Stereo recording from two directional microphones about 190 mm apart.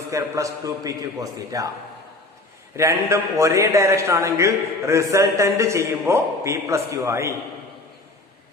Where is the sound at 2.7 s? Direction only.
15° right (ahead or behind).